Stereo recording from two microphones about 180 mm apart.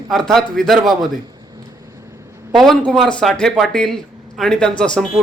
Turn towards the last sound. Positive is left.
turn(degrees=5)  # may be behind; listen again after turning